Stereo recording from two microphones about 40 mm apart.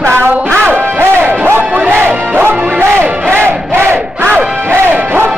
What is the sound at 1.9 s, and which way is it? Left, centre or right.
Speech, right.